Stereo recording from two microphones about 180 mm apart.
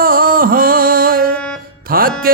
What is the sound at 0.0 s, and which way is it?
Music, 55° right (ahead or behind).